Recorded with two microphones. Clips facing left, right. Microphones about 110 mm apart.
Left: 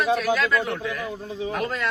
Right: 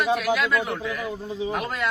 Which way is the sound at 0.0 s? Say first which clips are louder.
Left 1 dB; 5° right (ahead or behind).